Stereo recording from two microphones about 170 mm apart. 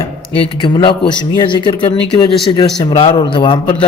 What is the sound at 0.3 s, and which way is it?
A man's voice, 30° left (ahead or behind).